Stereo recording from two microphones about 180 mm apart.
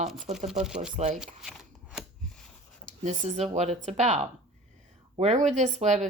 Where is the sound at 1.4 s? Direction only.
5° right (ahead or behind).